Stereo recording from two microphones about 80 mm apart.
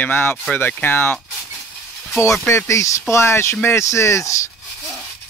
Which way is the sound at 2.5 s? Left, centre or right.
Left.